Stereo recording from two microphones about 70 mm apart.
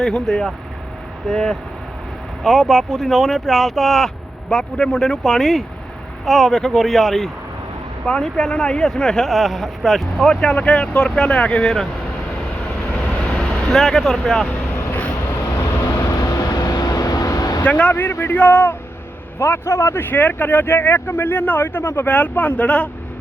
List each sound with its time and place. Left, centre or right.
0.0 s speech: centre
9.3 s speech: centre
10.2 s speech: centre
12.9 s vehicle: left
13.7 s speech: centre
15.5 s vehicle: left
15.9 s vehicle: left
16.5 s vehicle: left
17.6 s speech: centre
19.4 s speech: left; by 22.9 s centre